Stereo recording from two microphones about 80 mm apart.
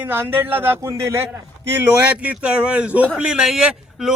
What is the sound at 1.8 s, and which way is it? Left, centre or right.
A man's voice, centre.